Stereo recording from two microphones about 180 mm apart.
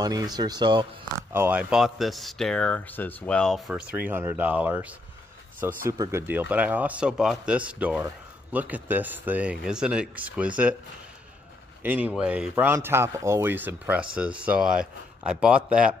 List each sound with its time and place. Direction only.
0.0 s speech: 20° right (ahead or behind)
1.3 s speech: 10° right (ahead or behind)
11.8 s speech: 10° right (ahead or behind)